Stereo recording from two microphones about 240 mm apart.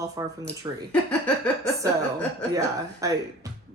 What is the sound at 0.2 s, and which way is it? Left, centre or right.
Speech, centre.